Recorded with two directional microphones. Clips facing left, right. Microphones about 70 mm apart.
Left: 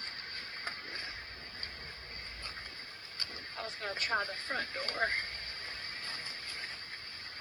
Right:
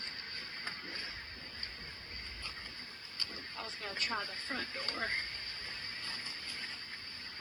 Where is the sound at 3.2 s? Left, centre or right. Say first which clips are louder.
Left 2 dB; left.